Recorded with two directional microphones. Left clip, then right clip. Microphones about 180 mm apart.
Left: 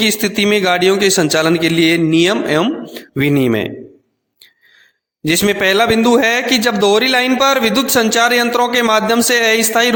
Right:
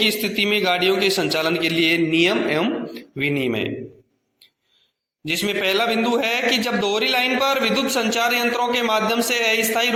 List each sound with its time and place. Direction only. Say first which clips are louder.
0.0 s a man's voice: left 5 dB; 60° left (ahead or behind)
5.2 s a man's voice: left 8 dB; 70° left (ahead or behind)